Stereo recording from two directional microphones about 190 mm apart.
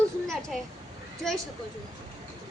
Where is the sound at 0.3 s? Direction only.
Centre (ahead or behind).